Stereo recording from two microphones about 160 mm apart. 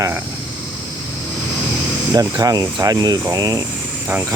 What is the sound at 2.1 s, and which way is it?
Speech, 25° right (ahead or behind).